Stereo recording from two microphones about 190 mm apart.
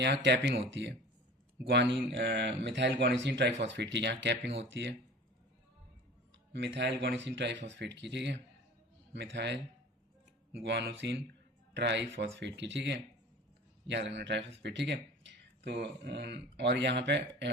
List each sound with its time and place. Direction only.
0.0 s speech: 60° right (ahead or behind)
6.5 s speech: 65° right (ahead or behind)